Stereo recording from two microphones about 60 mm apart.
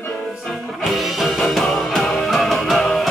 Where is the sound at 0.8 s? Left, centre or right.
Centre.